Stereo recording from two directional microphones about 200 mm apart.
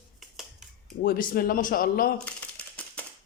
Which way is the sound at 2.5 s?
5° left (ahead or behind).